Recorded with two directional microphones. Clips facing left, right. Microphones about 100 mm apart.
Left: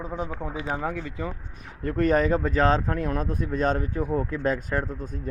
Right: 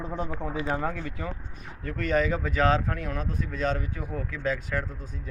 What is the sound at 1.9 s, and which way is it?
Speech, 40° left (ahead or behind).